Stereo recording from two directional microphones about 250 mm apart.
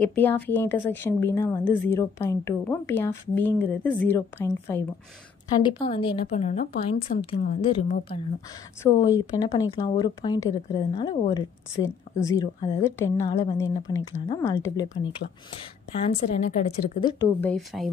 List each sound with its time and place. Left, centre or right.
0.0 s speech: centre
5.6 s a woman's voice: centre
16.3 s a woman's voice: left
17.0 s speech: centre